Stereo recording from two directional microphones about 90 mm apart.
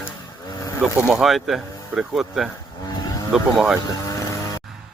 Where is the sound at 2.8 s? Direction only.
40° left (ahead or behind).